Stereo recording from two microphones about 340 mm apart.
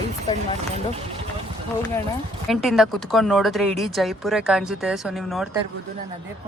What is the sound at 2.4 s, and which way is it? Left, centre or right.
Speech, centre.